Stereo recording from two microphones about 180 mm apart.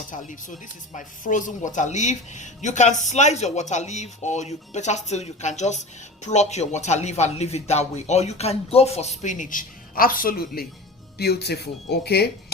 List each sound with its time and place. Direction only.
0.1 s speech: 45° left (ahead or behind); by 12.3 s 65° left (ahead or behind)